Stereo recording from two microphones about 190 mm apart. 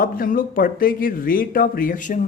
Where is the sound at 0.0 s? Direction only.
50° left (ahead or behind).